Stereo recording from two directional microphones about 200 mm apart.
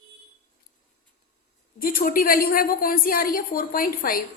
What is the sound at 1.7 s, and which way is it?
A woman's voice, 45° left (ahead or behind).